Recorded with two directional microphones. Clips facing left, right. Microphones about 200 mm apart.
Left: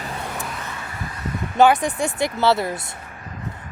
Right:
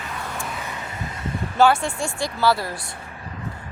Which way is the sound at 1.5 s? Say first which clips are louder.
Left 2 dB; 20° left (ahead or behind).